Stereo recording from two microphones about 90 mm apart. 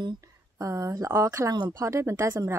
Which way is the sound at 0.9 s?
35° right (ahead or behind).